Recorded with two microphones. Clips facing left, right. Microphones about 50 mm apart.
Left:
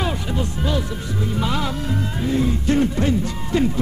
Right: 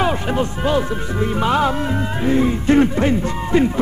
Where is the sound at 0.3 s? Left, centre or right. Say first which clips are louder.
Right 5 dB; right.